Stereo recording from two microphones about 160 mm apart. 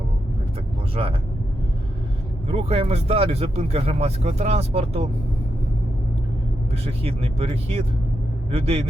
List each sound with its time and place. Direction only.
1.0 s speech: 40° right (ahead or behind)
2.5 s speech: 40° right (ahead or behind)
6.8 s speech: 40° right (ahead or behind)